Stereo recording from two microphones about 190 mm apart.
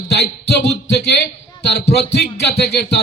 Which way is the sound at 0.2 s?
65° left (ahead or behind).